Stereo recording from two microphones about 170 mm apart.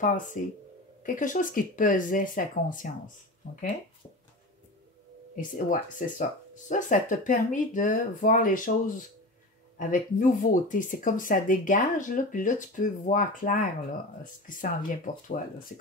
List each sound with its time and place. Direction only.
0.0 s speech: 50° left (ahead or behind)
5.3 s speech: 50° left (ahead or behind)